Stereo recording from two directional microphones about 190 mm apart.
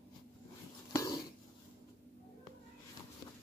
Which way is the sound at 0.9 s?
20° left (ahead or behind).